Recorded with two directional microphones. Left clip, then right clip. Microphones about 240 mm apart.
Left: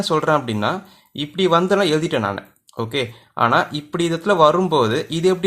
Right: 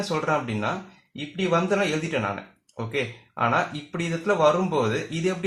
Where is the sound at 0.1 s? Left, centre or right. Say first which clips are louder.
Left 8 dB; left.